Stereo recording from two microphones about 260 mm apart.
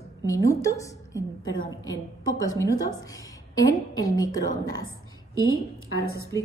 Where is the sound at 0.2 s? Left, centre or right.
Centre.